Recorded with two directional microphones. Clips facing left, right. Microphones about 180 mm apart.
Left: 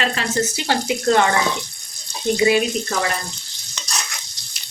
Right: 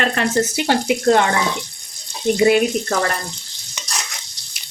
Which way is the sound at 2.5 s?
55° right (ahead or behind).